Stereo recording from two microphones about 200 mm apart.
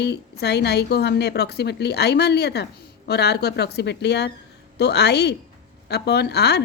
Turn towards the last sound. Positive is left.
turn(degrees=55)  # may be behind; listen again after turning